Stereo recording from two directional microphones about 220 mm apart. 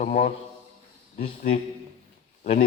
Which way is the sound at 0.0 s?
35° left (ahead or behind).